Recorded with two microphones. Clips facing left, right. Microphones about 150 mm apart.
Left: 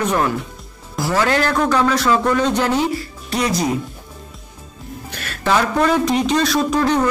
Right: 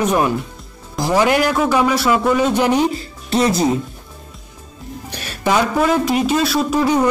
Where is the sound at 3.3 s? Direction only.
25° right (ahead or behind).